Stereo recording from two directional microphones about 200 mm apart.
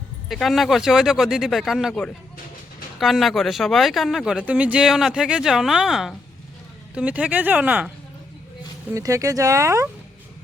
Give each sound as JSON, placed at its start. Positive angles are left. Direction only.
{"t": 0.3, "sound": "speech", "side_deg": 0}